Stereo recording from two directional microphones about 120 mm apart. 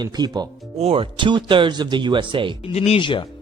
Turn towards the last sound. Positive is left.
turn(degrees=45)  # may be behind; listen again after turning